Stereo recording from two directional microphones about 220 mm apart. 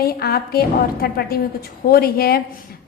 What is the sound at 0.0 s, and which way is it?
A woman's voice, 45° left (ahead or behind).